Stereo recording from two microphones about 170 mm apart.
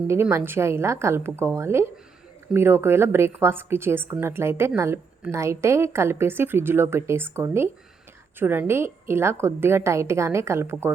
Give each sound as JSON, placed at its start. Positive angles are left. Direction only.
{"t": 0.1, "sound": "a woman's voice", "side_deg": -15}